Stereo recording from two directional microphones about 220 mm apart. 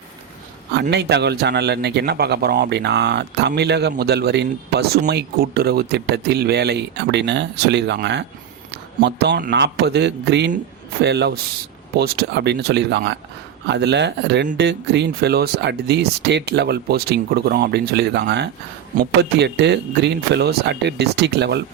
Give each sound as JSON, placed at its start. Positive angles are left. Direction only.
{"t": 0.7, "sound": "a man's voice", "side_deg": -50}